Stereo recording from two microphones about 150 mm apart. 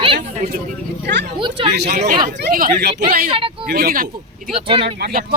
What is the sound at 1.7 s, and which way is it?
Speech, 90° right.